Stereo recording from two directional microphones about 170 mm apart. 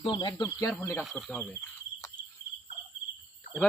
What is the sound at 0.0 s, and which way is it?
Speech, 30° left (ahead or behind).